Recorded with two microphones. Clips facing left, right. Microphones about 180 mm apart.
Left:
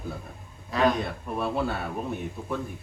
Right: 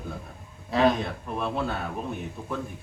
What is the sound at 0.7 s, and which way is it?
Speech, 30° right (ahead or behind).